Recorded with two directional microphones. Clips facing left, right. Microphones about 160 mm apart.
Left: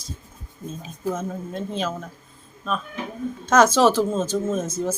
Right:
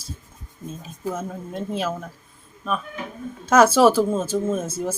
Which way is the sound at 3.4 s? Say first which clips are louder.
Right 2 dB; 5° right (ahead or behind).